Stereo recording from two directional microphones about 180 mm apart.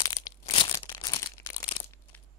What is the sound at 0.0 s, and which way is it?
Crushing, 25° left (ahead or behind).